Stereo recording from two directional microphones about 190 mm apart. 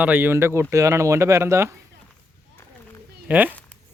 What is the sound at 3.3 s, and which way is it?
Speech, 10° right (ahead or behind).